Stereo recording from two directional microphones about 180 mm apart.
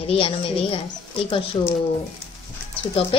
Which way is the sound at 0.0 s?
30° left (ahead or behind).